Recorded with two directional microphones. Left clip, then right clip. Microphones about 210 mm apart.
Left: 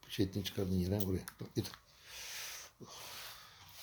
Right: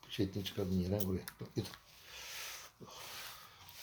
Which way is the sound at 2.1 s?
50° left (ahead or behind).